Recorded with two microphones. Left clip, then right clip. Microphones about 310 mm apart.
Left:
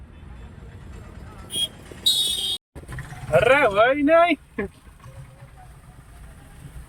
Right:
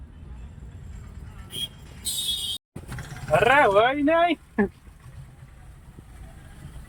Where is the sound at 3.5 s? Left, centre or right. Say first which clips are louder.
Left 1 dB; centre.